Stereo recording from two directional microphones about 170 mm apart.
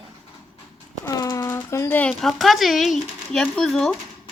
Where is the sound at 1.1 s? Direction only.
20° left (ahead or behind).